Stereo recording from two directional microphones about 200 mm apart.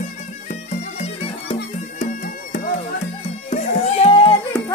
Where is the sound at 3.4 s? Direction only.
30° left (ahead or behind).